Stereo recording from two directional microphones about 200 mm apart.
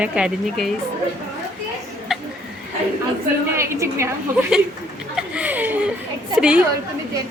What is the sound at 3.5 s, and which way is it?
Speech, 15° right (ahead or behind).